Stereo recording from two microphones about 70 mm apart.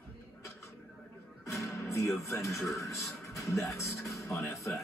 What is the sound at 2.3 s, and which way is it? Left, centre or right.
A man's voice, left.